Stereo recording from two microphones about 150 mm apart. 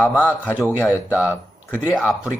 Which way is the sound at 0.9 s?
10° right (ahead or behind).